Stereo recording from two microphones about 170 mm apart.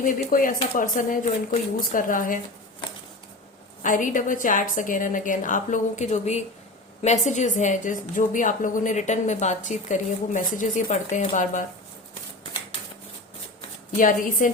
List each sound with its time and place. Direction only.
0.0 s a woman's voice: 55° left (ahead or behind)
3.8 s a woman's voice: 50° left (ahead or behind)
13.9 s a woman's voice: 50° left (ahead or behind)